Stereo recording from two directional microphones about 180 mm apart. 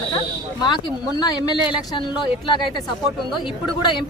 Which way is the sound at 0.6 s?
25° left (ahead or behind).